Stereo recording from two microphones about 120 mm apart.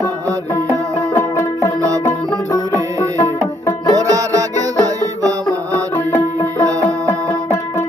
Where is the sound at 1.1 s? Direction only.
20° left (ahead or behind).